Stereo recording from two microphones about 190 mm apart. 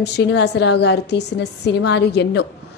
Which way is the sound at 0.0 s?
65° left (ahead or behind).